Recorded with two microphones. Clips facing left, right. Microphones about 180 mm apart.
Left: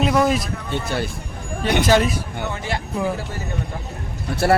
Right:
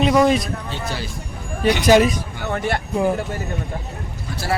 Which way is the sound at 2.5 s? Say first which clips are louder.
Right 8 dB; 60° right (ahead or behind).